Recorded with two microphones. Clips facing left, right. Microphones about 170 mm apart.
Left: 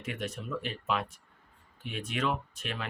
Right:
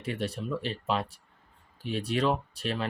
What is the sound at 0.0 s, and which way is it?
Speech, 30° right (ahead or behind).